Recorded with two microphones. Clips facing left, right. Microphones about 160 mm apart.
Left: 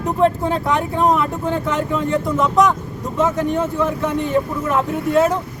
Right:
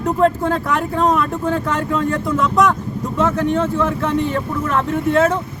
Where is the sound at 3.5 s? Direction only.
15° left (ahead or behind).